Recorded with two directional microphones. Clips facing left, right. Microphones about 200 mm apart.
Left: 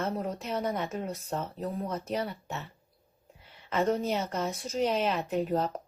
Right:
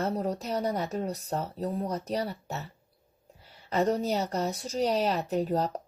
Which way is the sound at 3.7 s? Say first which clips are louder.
Right 1 dB; 35° right (ahead or behind).